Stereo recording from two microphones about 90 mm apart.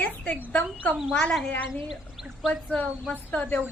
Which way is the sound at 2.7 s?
10° left (ahead or behind).